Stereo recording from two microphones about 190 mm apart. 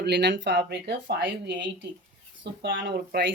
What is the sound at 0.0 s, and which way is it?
Speech, 65° right (ahead or behind).